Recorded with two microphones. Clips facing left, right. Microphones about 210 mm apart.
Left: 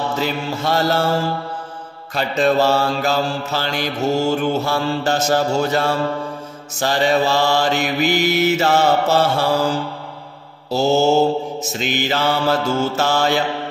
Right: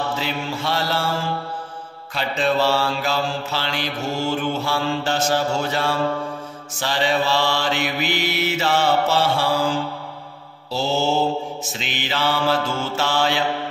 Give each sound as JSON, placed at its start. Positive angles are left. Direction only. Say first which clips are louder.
{"t": 0.1, "sound": "mantra", "louder": "left 4 dB", "side_deg": 45}